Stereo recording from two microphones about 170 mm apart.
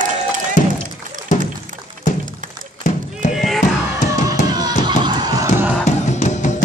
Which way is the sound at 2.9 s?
50° left (ahead or behind).